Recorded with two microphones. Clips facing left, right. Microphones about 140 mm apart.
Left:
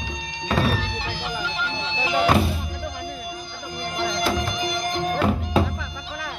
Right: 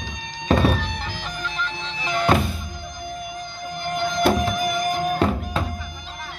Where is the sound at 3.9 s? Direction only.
90° left.